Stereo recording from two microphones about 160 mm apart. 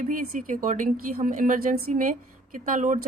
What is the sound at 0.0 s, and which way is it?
A woman's voice, 55° right (ahead or behind).